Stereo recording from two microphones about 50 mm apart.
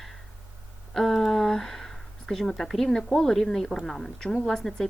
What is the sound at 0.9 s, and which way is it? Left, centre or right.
Speech, centre.